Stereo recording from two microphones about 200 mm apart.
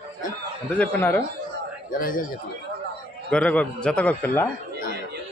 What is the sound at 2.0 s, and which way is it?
Speech, 45° left (ahead or behind).